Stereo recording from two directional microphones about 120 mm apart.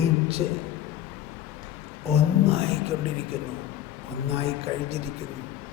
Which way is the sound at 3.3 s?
55° right (ahead or behind).